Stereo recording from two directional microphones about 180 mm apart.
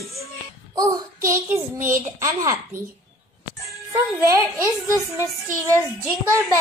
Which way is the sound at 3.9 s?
15° right (ahead or behind).